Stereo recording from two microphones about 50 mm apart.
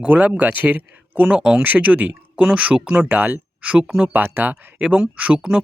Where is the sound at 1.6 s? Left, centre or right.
Right.